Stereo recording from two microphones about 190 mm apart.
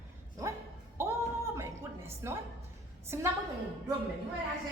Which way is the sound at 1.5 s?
15° right (ahead or behind).